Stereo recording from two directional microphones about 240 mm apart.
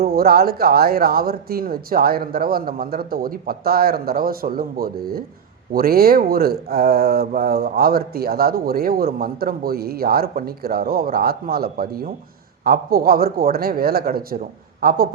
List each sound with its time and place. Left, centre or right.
0.0 s speech: right